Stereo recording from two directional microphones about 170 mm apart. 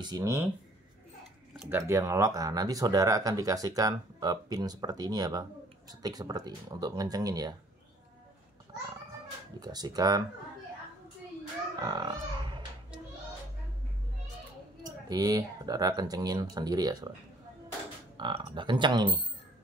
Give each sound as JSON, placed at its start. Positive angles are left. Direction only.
{"t": 0.0, "sound": "speech", "side_deg": -20}
{"t": 1.7, "sound": "speech", "side_deg": -15}
{"t": 9.6, "sound": "speech", "side_deg": -25}
{"t": 11.8, "sound": "speech", "side_deg": -25}
{"t": 14.9, "sound": "speech", "side_deg": -20}
{"t": 18.1, "sound": "speech", "side_deg": -30}